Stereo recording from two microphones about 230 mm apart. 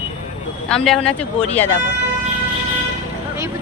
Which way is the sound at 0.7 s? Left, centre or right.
Centre.